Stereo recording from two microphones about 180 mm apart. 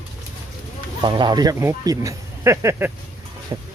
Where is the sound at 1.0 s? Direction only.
25° right (ahead or behind).